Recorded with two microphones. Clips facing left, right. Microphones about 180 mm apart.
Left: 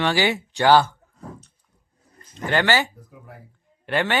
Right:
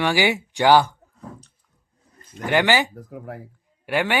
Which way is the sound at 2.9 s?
70° right (ahead or behind).